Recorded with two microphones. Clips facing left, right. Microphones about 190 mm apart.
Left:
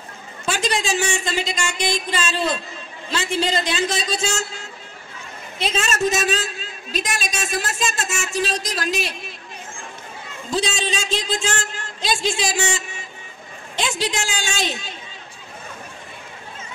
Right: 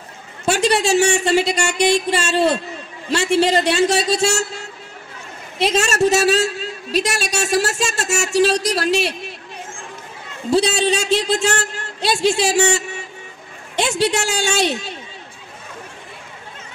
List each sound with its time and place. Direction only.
0.5 s speech: 65° right (ahead or behind)
10.5 s a man's voice: 65° right (ahead or behind)